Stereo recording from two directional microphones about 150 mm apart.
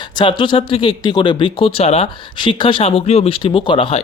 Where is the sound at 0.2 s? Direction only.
30° left (ahead or behind).